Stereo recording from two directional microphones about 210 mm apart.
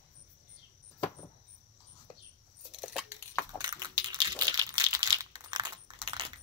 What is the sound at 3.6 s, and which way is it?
Crushing, 20° right (ahead or behind).